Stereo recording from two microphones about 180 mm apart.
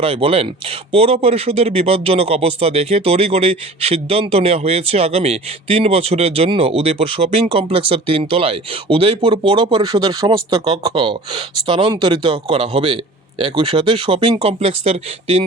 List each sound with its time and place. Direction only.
0.0 s speech: 30° right (ahead or behind)